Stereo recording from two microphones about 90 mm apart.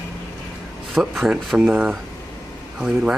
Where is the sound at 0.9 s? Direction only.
Centre (ahead or behind).